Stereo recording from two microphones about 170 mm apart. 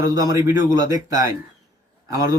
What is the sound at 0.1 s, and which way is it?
Speech, 20° right (ahead or behind).